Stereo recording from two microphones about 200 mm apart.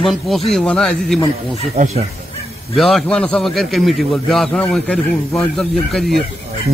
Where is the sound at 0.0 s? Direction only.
Centre (ahead or behind).